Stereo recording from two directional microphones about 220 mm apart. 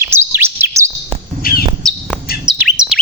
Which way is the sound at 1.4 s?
45° left (ahead or behind).